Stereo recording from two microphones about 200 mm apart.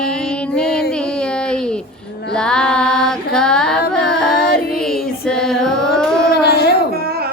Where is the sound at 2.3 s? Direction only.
5° left (ahead or behind).